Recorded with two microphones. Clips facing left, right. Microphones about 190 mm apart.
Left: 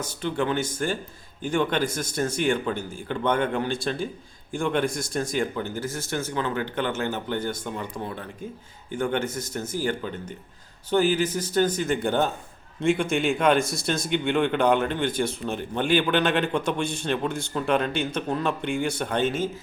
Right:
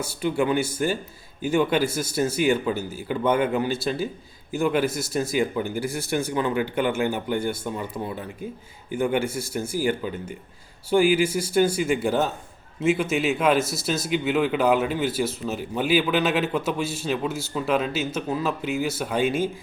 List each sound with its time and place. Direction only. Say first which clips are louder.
0.0 s a man's voice: right 3 dB; 10° right (ahead or behind)